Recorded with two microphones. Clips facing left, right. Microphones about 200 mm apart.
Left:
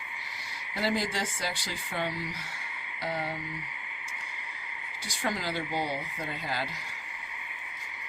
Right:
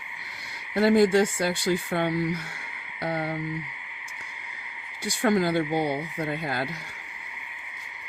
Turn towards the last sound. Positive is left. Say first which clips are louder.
# right 6 dB
turn(degrees=-55)  # may be behind; listen again after turning